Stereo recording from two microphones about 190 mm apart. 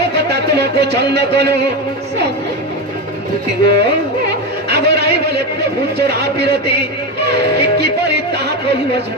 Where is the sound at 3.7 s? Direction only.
60° right (ahead or behind).